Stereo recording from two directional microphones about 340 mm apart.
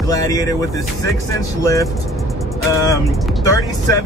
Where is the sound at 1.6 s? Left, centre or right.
Centre.